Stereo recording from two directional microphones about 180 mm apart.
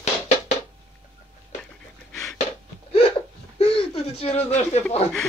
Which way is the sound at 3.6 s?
35° left (ahead or behind).